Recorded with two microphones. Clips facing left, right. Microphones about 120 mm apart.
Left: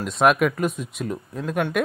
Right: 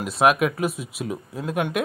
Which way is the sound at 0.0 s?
Centre (ahead or behind).